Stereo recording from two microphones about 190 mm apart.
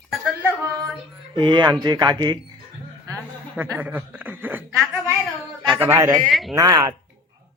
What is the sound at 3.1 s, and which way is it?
Chuckle, 10° right (ahead or behind).